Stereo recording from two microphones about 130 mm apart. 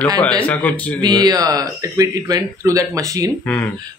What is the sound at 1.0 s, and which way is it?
Speech, 30° right (ahead or behind).